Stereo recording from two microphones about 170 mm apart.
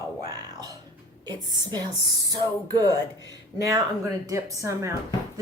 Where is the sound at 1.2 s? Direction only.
25° right (ahead or behind).